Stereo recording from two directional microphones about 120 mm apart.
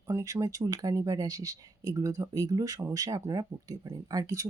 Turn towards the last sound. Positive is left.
turn(degrees=-30)  # may be behind; listen again after turning